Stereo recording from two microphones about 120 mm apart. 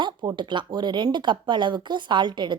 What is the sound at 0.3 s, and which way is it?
A woman's voice, 40° right (ahead or behind).